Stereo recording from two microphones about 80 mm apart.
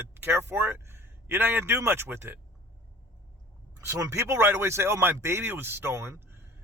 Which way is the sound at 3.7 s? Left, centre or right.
Right.